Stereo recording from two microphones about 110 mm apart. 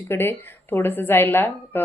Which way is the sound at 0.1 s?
20° left (ahead or behind).